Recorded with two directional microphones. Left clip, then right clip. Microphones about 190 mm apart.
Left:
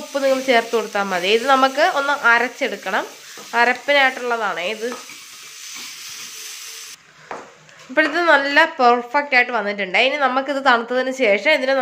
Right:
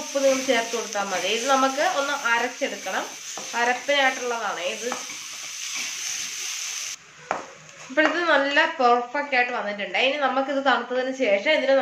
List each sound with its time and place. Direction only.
0.5 s a woman's voice: 65° left (ahead or behind)
7.9 s a woman's voice: 70° left (ahead or behind)